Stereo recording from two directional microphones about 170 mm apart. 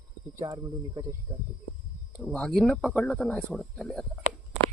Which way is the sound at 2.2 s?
5° left (ahead or behind).